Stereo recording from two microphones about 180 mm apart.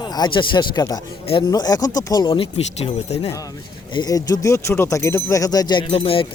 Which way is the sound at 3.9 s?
20° left (ahead or behind).